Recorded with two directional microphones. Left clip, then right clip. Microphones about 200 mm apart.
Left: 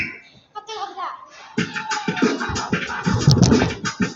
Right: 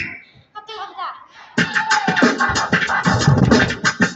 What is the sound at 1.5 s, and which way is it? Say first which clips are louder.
Music: right 8 dB; 60° right (ahead or behind).